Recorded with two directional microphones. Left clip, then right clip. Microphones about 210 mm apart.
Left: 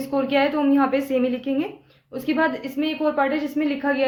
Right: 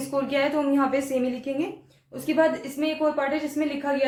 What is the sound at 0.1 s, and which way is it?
A woman's voice, 45° left (ahead or behind).